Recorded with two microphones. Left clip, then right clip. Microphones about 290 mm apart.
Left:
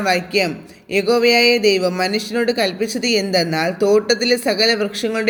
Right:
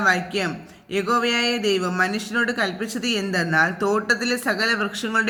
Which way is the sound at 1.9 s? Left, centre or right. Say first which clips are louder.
Left 3 dB; right.